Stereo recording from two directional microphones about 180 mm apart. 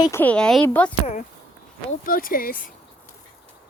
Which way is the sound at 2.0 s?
50° left (ahead or behind).